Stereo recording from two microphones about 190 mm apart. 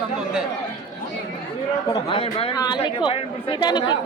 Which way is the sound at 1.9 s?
25° left (ahead or behind).